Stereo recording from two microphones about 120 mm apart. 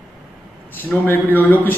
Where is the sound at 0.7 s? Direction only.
15° left (ahead or behind).